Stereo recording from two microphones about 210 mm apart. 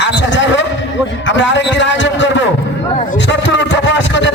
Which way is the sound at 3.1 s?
60° left (ahead or behind).